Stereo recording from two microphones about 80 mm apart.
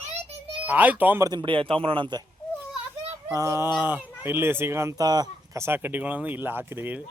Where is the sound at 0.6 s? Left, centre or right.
Right.